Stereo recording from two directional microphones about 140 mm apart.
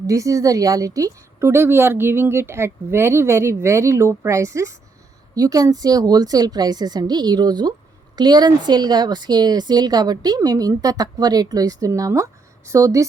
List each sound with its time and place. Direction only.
0.1 s speech: 25° right (ahead or behind)